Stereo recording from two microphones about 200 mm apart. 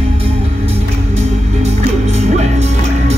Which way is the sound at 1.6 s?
35° right (ahead or behind).